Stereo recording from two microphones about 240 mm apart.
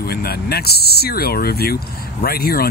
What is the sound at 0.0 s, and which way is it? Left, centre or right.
Speech, left.